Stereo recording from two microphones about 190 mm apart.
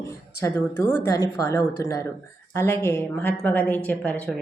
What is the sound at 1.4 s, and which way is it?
Speech, 20° left (ahead or behind).